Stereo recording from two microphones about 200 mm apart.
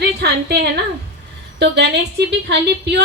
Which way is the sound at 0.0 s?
55° right (ahead or behind).